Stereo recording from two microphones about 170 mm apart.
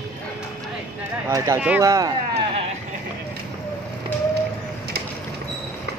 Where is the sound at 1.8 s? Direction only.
20° right (ahead or behind).